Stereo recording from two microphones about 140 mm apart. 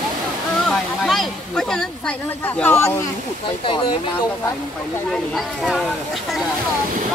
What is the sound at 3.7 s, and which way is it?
Speech, 40° left (ahead or behind).